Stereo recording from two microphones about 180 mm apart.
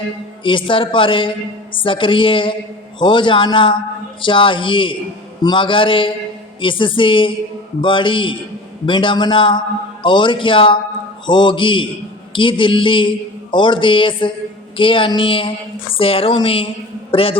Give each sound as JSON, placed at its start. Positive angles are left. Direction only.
{"t": 0.4, "sound": "a man's voice", "side_deg": 30}